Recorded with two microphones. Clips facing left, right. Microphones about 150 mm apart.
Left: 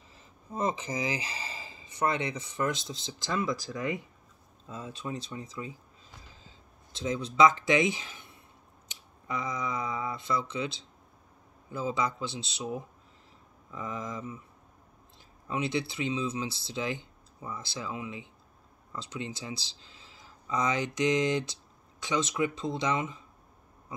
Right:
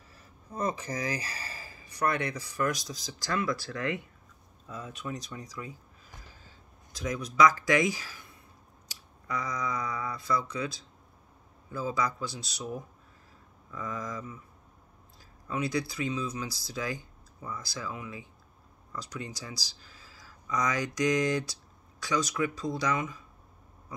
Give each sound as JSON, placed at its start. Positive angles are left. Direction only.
{"t": 0.1, "sound": "speech", "side_deg": 20}
{"t": 4.6, "sound": "speech", "side_deg": 30}
{"t": 6.9, "sound": "speech", "side_deg": 25}
{"t": 15.4, "sound": "speech", "side_deg": 25}